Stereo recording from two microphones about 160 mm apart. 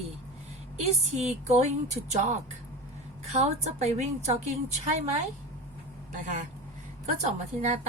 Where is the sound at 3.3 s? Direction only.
45° right (ahead or behind).